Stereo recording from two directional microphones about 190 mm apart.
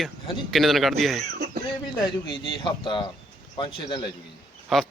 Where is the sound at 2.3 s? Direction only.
25° left (ahead or behind).